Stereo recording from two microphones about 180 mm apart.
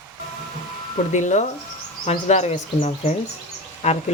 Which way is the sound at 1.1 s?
40° left (ahead or behind).